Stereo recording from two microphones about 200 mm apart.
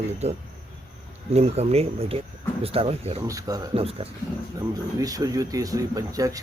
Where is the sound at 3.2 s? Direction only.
15° right (ahead or behind).